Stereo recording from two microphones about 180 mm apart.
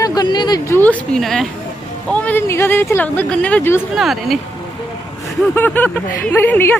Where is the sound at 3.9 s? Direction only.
Centre (ahead or behind).